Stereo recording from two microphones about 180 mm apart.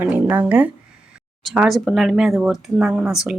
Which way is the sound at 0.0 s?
10° right (ahead or behind).